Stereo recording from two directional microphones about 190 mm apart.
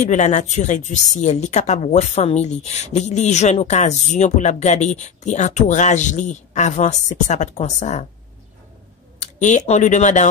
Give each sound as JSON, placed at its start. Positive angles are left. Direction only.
{"t": 0.0, "sound": "speech", "side_deg": 40}
{"t": 9.2, "sound": "speech", "side_deg": 40}